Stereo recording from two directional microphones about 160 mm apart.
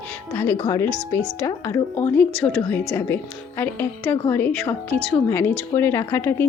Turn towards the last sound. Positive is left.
turn(degrees=15)  # may be behind; listen again after turning